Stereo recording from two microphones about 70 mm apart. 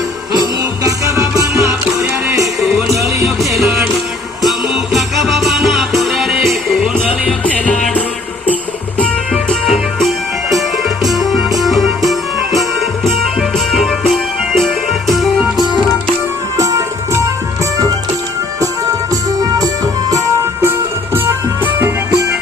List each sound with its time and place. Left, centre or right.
0.9 s music: right
2.4 s music: centre
4.4 s music: centre
7.4 s music: centre
9.5 s music: centre
14.1 s music: centre
16.6 s music: right
20.6 s music: right